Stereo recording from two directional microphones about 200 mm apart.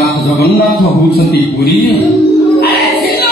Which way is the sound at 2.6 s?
55° left (ahead or behind).